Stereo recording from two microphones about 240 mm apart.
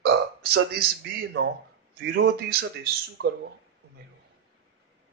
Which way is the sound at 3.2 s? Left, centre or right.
Right.